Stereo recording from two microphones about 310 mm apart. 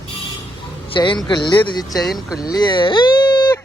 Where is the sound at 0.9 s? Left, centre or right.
Centre.